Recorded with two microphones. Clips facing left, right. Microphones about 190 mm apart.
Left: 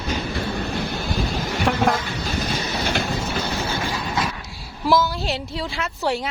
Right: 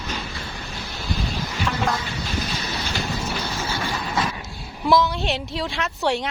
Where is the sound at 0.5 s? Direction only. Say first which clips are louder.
Left 9 dB; 65° left (ahead or behind).